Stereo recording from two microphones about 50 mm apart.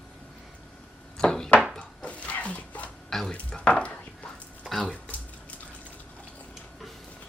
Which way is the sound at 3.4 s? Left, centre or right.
Left.